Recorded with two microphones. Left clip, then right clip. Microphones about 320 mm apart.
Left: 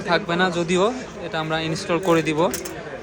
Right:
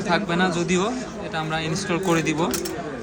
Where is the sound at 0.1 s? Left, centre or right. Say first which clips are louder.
Left 2 dB; centre.